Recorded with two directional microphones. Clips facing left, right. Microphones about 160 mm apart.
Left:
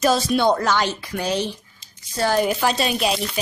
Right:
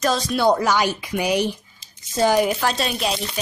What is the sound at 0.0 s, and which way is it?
Speech, 5° left (ahead or behind).